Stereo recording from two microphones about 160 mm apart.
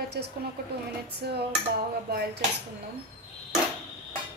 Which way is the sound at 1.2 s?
90° right.